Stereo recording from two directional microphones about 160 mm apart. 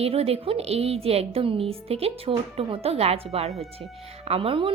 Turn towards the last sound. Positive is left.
turn(degrees=-35)  # may be behind; listen again after turning